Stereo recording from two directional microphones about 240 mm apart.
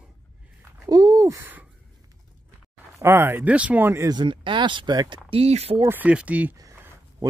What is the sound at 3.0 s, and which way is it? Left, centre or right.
Speech, centre.